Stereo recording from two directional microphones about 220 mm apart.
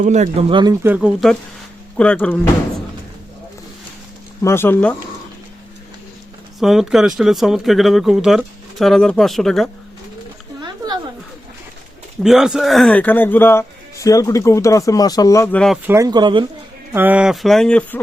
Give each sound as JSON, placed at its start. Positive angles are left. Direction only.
{"t": 0.0, "sound": "speech", "side_deg": -30}
{"t": 4.4, "sound": "speech", "side_deg": 10}
{"t": 6.6, "sound": "speech", "side_deg": 0}
{"t": 12.2, "sound": "speech", "side_deg": -5}
{"t": 15.9, "sound": "speech", "side_deg": -15}
{"t": 16.9, "sound": "speech", "side_deg": -10}